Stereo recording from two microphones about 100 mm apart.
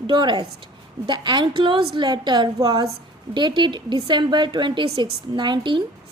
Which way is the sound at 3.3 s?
50° right (ahead or behind).